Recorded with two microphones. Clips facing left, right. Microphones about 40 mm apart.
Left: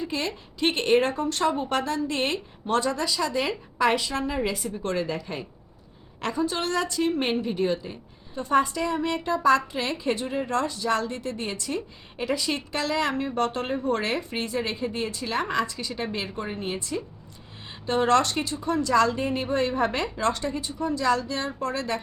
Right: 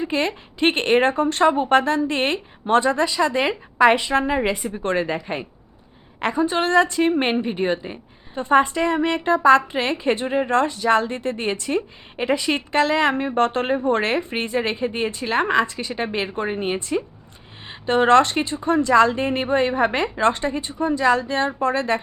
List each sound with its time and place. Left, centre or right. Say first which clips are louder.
0.0 s a woman's voice: right 7 dB; right